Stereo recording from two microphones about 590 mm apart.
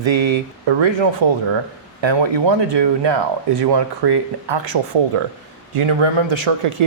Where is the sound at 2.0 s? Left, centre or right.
Right.